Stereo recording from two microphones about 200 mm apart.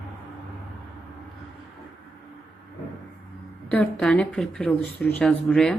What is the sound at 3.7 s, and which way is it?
Speech, 5° left (ahead or behind).